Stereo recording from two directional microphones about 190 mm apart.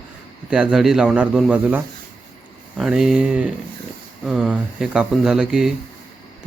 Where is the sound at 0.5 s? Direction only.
5° right (ahead or behind).